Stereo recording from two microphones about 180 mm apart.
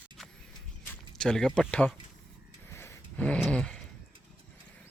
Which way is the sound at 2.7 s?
15° left (ahead or behind).